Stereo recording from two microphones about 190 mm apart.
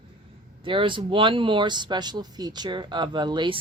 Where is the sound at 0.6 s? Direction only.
25° right (ahead or behind).